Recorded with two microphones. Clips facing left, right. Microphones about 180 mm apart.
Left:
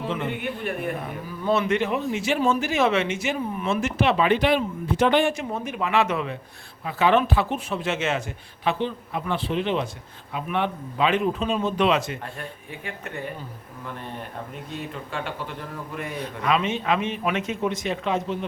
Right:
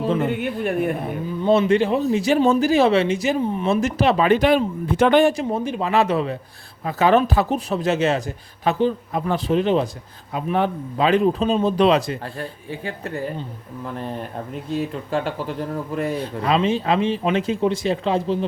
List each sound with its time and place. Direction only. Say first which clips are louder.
0.0 s speech: right 7 dB; 40° right (ahead or behind)
1.0 s speech: right 6 dB; 25° right (ahead or behind); by 5.2 s 50° right (ahead or behind)
5.2 s speech: right 6 dB; 35° right (ahead or behind)
14.7 s speech: right 11 dB; 35° right (ahead or behind)